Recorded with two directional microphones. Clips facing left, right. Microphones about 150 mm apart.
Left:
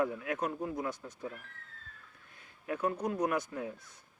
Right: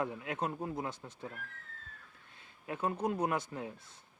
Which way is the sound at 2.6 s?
25° right (ahead or behind).